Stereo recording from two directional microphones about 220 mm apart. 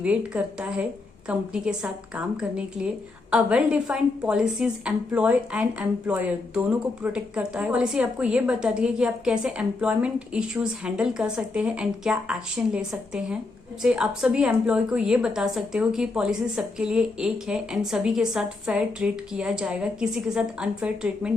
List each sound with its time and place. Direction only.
0.0 s a woman's voice: 5° right (ahead or behind)